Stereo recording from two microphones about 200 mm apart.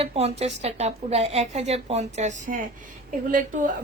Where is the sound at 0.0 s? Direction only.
30° right (ahead or behind).